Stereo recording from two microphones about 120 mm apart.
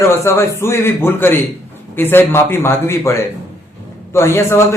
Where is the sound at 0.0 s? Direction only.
25° left (ahead or behind).